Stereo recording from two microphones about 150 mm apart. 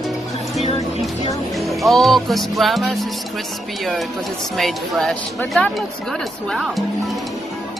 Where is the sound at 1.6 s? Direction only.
Centre (ahead or behind).